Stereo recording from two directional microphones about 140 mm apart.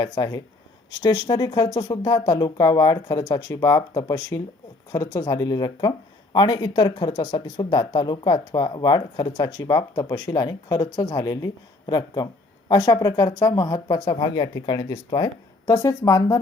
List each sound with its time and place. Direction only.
0.0 s speech: 25° left (ahead or behind)